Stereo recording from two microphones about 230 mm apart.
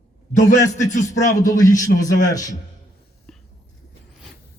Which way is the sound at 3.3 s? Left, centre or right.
Centre.